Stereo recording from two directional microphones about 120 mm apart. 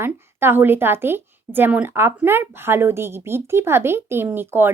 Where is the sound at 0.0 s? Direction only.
20° right (ahead or behind).